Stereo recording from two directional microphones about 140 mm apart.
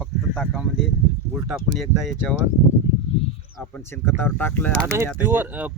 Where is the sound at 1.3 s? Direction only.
5° right (ahead or behind).